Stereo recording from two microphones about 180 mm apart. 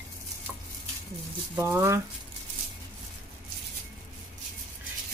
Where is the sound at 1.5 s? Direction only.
15° right (ahead or behind).